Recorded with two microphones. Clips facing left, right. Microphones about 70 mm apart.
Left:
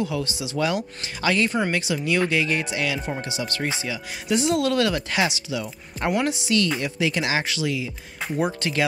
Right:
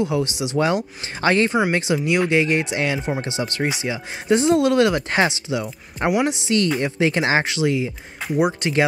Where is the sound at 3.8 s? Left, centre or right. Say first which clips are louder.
Right 6 dB; right.